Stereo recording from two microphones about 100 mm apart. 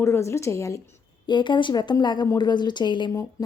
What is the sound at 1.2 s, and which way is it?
Speech, 50° left (ahead or behind).